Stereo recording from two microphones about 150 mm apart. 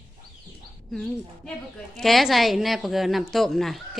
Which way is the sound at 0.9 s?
Centre (ahead or behind).